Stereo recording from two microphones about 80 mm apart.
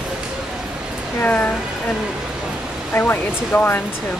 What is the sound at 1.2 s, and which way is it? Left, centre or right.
Speech, left.